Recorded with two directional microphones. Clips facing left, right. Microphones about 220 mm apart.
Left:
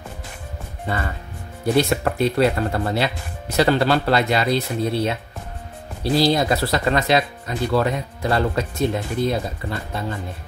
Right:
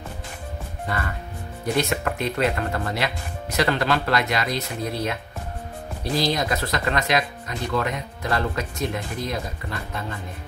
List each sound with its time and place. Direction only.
1.8 s speech: 35° left (ahead or behind)